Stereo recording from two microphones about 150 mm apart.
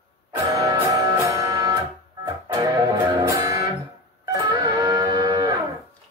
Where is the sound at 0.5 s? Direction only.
20° right (ahead or behind).